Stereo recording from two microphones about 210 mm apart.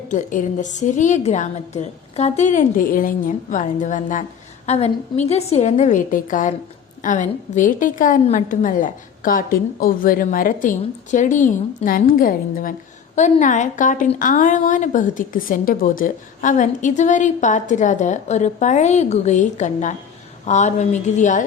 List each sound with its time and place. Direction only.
0.1 s a woman's voice: 35° left (ahead or behind)